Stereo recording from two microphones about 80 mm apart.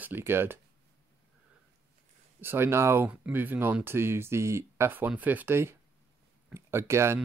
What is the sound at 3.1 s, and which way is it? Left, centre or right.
Speech, centre.